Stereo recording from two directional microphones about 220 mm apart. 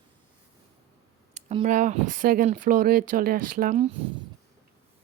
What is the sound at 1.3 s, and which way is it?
Speech, 30° right (ahead or behind).